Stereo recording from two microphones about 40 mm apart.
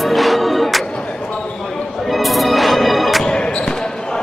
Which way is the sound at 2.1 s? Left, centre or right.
Centre.